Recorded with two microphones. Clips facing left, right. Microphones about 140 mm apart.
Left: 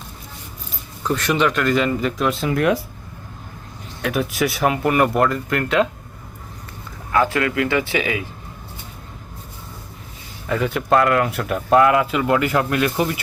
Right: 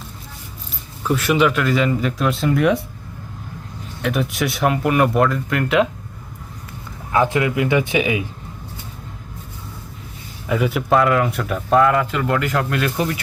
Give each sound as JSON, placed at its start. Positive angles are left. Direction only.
{"t": 1.0, "sound": "speech", "side_deg": -10}
{"t": 4.0, "sound": "speech", "side_deg": 0}
{"t": 7.1, "sound": "speech", "side_deg": -20}
{"t": 10.5, "sound": "speech", "side_deg": -5}